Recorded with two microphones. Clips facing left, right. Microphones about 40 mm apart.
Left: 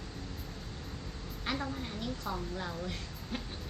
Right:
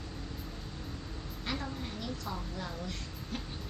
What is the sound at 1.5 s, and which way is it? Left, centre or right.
A woman's voice, centre.